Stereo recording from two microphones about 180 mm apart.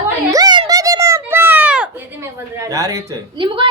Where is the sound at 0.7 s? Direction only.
20° right (ahead or behind).